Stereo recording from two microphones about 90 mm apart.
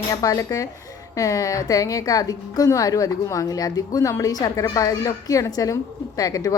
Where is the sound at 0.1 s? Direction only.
40° left (ahead or behind).